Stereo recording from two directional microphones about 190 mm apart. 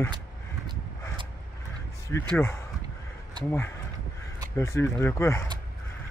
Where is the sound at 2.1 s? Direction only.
15° left (ahead or behind).